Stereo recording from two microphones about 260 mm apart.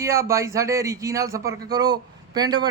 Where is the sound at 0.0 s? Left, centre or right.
Centre.